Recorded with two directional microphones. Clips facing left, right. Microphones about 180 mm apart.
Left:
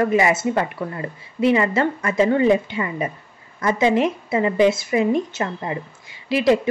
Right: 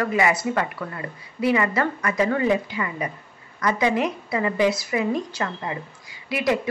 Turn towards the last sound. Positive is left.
turn(degrees=25)  # may be behind; listen again after turning